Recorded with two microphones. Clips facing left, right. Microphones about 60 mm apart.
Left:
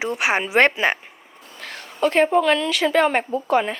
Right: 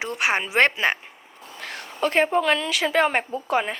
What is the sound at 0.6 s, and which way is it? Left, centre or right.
Speech, left.